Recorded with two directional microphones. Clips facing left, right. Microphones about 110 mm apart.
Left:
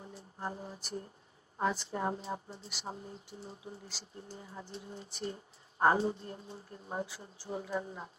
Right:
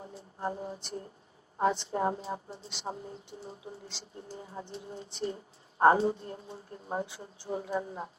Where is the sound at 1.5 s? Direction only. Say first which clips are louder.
Right 5 dB; 25° right (ahead or behind).